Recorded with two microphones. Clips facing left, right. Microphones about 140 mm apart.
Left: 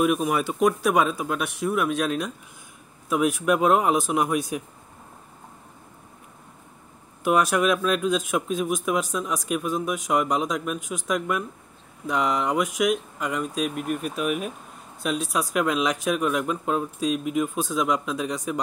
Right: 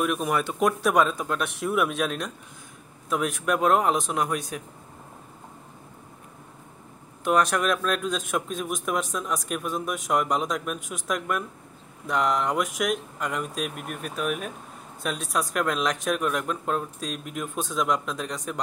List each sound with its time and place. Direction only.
0.0 s a man's voice: 5° left (ahead or behind)
7.2 s a man's voice: 5° left (ahead or behind)